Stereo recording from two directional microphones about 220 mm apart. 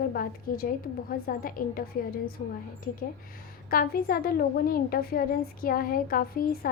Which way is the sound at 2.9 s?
40° left (ahead or behind).